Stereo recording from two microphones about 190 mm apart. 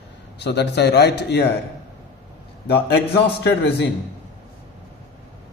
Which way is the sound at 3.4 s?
65° left (ahead or behind).